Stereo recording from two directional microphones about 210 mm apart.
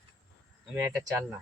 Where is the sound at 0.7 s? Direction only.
10° right (ahead or behind).